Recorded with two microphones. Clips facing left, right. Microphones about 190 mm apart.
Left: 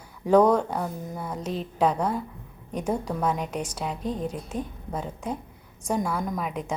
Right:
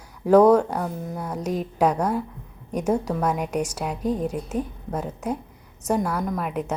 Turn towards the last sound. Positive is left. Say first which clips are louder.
# right 3 dB
turn(degrees=-5)  # may be behind; listen again after turning